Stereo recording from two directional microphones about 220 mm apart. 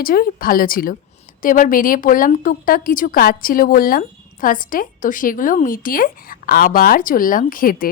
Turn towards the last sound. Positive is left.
turn(degrees=40)  # may be behind; listen again after turning